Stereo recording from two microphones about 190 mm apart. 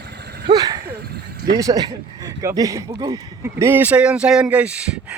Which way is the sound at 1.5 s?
20° right (ahead or behind).